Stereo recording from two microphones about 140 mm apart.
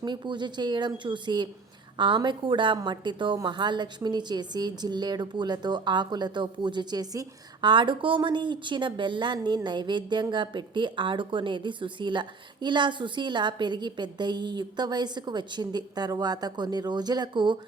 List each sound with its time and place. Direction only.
0.0 s speech: 35° right (ahead or behind)